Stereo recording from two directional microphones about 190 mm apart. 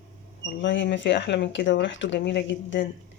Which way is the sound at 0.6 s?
70° left (ahead or behind).